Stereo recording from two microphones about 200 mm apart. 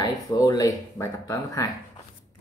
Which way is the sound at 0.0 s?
20° left (ahead or behind).